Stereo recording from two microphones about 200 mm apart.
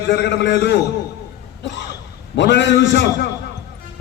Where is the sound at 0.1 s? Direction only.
60° left (ahead or behind).